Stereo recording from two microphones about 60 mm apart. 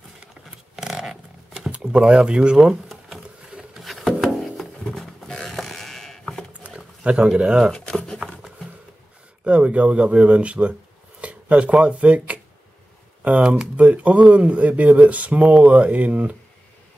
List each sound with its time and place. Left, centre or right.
0.7 s a sound: centre
1.8 s speech: centre
3.4 s patter: centre
3.8 s music: centre
6.6 s dog: centre
7.7 s a sound: centre
9.4 s speech: right